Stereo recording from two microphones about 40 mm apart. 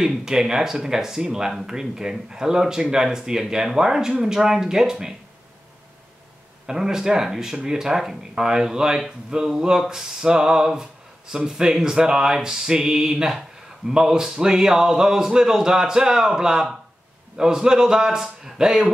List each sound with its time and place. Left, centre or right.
0.0 s speech: centre
6.7 s speech: centre